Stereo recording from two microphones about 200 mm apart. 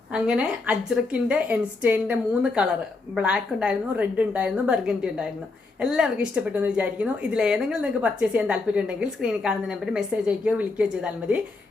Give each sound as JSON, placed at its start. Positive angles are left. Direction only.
{"t": 0.1, "sound": "a woman's voice", "side_deg": -5}